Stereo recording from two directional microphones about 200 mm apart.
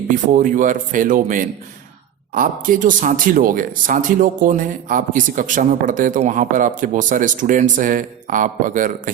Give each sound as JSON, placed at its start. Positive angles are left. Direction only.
{"t": 0.1, "sound": "speech", "side_deg": -40}